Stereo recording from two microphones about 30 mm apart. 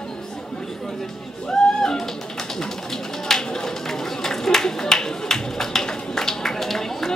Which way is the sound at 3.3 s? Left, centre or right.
Left.